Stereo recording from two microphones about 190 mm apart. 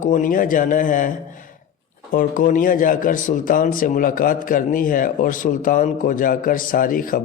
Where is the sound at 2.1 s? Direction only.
45° left (ahead or behind).